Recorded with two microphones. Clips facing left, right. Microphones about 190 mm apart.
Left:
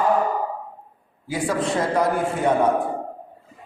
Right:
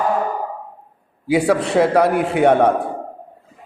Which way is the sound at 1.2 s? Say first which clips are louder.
Right 7 dB; 70° right (ahead or behind).